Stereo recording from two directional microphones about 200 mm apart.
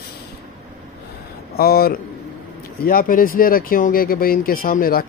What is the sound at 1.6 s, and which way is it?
Speech, 50° left (ahead or behind).